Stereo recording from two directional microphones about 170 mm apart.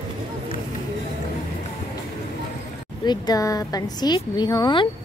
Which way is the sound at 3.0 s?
20° left (ahead or behind).